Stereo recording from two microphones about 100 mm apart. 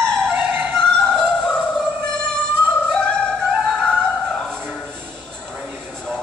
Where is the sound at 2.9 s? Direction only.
10° left (ahead or behind).